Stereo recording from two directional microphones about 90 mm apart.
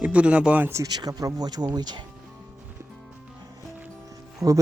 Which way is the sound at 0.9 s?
50° right (ahead or behind).